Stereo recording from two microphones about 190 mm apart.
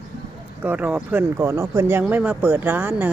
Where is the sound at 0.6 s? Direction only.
10° right (ahead or behind).